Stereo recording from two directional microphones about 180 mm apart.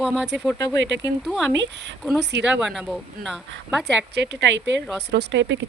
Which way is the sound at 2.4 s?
Centre (ahead or behind).